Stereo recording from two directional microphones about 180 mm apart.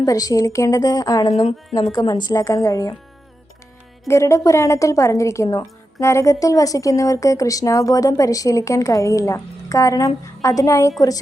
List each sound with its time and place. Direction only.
0.0 s a woman's voice: 20° left (ahead or behind)
4.1 s a woman's voice: 15° left (ahead or behind)